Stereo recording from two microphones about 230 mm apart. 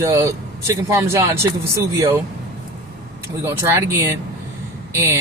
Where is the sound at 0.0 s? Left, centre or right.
Centre.